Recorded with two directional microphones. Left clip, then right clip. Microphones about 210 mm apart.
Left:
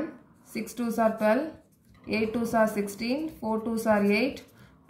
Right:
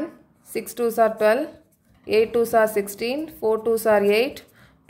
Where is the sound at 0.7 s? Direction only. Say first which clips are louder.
Right 7 dB; 55° right (ahead or behind).